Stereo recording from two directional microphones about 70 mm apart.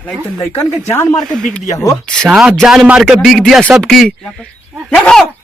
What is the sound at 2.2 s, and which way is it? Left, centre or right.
Speech, centre.